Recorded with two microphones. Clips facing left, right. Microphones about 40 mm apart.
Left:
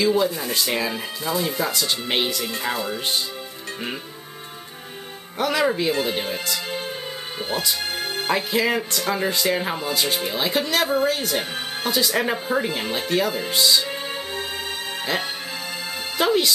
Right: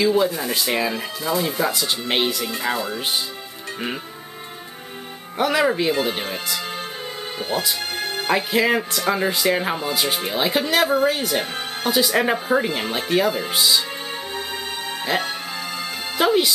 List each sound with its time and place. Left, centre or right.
0.0 s speech: centre
5.4 s speech: centre
16.2 s speech: centre